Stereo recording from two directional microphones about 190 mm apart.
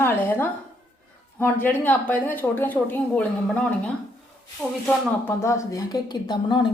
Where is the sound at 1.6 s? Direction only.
10° left (ahead or behind).